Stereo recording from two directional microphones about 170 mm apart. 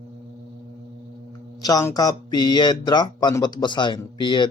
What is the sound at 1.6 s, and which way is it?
Speech, 20° left (ahead or behind).